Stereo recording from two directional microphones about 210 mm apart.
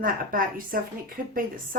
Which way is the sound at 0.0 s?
40° right (ahead or behind).